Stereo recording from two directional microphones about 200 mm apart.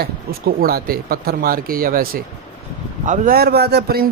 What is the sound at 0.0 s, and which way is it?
A man's voice, 50° right (ahead or behind).